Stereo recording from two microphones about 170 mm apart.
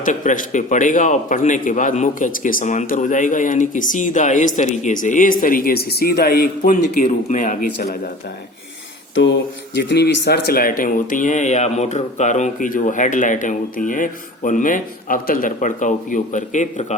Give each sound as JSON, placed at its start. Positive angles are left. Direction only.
{"t": 0.0, "sound": "a man's voice", "side_deg": 45}
{"t": 9.1, "sound": "a man's voice", "side_deg": 90}